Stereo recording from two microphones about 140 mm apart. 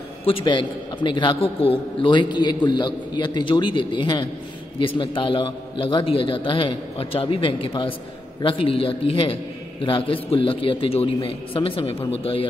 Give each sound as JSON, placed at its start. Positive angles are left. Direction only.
{"t": 0.2, "sound": "a man's voice", "side_deg": 40}